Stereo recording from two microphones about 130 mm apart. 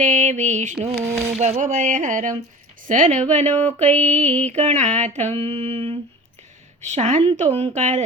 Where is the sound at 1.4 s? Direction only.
65° right (ahead or behind).